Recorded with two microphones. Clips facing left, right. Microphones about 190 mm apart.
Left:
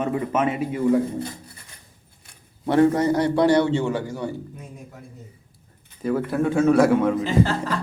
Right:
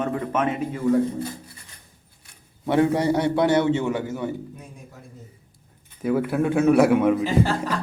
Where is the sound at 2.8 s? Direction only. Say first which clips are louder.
Left 2 dB; 10° right (ahead or behind).